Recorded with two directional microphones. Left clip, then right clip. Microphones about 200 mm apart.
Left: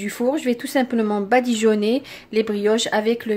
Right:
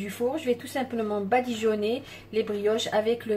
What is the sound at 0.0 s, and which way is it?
Speech, 50° left (ahead or behind).